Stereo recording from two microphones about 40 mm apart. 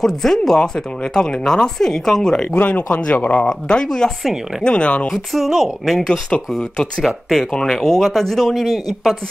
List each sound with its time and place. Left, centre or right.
0.0 s speech: centre
0.6 s speech: centre
2.7 s speech: left
3.4 s speech: centre
4.2 s speech: centre
4.6 s speech: left
5.1 s speech: centre
6.3 s speech: left
7.0 s speech: centre